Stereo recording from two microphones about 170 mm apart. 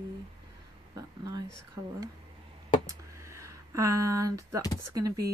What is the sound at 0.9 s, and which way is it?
Speech, 20° right (ahead or behind).